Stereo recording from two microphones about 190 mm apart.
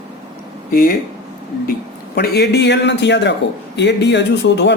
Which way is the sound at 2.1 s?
60° left (ahead or behind).